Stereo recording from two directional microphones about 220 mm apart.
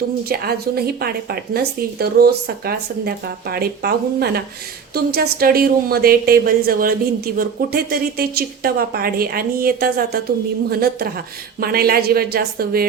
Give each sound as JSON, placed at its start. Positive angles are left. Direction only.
{"t": 0.3, "sound": "speech", "side_deg": -45}